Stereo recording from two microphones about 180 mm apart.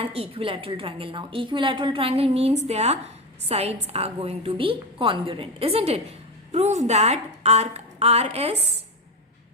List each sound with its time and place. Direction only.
0.0 s a woman's voice: 30° right (ahead or behind)